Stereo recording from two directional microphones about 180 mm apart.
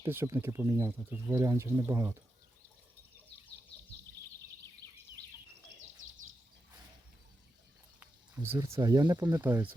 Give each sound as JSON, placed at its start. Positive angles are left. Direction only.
{"t": 0.0, "sound": "speech", "side_deg": -15}
{"t": 4.8, "sound": "a sound", "side_deg": -20}
{"t": 6.0, "sound": "bird", "side_deg": -40}
{"t": 8.4, "sound": "speech", "side_deg": -15}
{"t": 9.2, "sound": "speech", "side_deg": -10}